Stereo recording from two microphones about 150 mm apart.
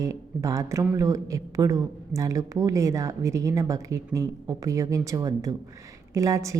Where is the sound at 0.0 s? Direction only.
20° right (ahead or behind).